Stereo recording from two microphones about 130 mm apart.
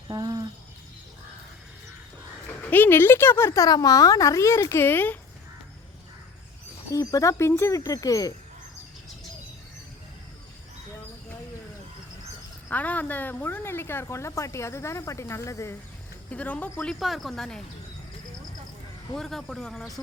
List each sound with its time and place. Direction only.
0.1 s a sound: 30° right (ahead or behind)
2.6 s speech: 15° left (ahead or behind)
6.9 s speech: 25° left (ahead or behind)
12.6 s speech: 10° left (ahead or behind)
16.3 s a woman's voice: 10° left (ahead or behind)
19.1 s speech: 5° left (ahead or behind)